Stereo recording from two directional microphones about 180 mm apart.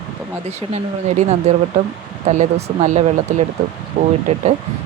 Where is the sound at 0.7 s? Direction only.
40° right (ahead or behind).